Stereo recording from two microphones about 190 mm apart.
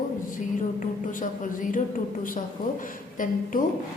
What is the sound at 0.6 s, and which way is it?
A woman's voice, 45° left (ahead or behind).